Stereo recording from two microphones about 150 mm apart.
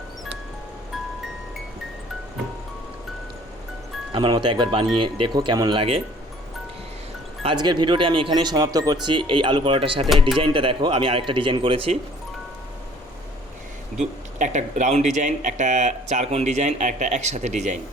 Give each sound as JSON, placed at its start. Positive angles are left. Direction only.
{"t": 4.1, "sound": "speech", "side_deg": -30}
{"t": 7.4, "sound": "speech", "side_deg": -30}
{"t": 14.3, "sound": "speech", "side_deg": -55}